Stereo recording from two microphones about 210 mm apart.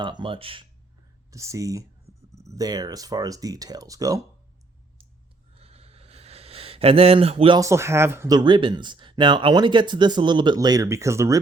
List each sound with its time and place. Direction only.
0.0 s speech: 20° right (ahead or behind)
1.3 s speech: 15° right (ahead or behind)
5.5 s speech: 30° right (ahead or behind); by 11.3 s 15° right (ahead or behind)